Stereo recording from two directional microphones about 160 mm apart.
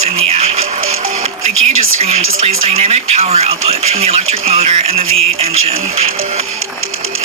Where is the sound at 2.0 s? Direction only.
40° right (ahead or behind).